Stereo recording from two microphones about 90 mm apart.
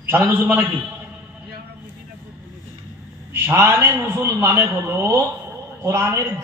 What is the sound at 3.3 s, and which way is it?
A man's voice, 30° right (ahead or behind).